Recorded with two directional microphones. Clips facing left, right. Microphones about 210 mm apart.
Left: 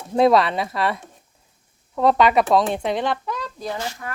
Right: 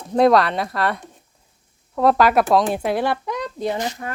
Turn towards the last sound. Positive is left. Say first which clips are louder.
# right 5 dB
turn(degrees=-20)  # may be behind; listen again after turning